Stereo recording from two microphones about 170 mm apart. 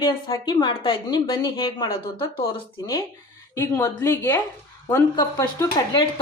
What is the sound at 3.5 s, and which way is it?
A woman's voice, 15° left (ahead or behind).